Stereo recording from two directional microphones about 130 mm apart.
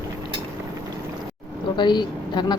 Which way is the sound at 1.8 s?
35° left (ahead or behind).